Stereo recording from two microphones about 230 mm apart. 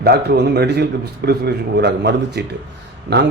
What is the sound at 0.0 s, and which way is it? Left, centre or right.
A man's voice, right.